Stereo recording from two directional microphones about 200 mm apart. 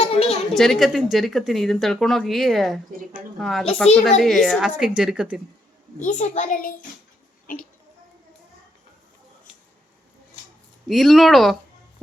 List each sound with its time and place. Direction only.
0.0 s a sound: 30° left (ahead or behind)
0.5 s speech: centre (ahead or behind)
6.0 s a child's voice: 35° left (ahead or behind)
10.8 s speech: centre (ahead or behind)